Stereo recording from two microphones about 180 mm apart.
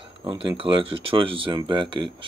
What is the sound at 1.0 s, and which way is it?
Speech, 30° right (ahead or behind).